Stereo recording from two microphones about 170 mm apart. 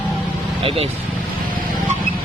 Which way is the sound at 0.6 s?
35° right (ahead or behind).